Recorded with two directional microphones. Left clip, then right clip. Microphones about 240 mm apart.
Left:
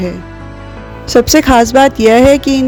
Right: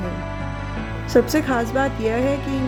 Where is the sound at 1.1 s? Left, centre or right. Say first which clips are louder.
Left 10 dB; left.